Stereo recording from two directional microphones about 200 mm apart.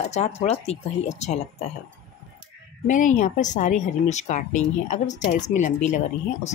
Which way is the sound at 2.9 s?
40° left (ahead or behind).